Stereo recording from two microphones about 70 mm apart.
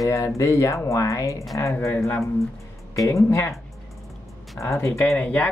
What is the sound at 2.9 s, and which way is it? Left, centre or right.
Speech, left.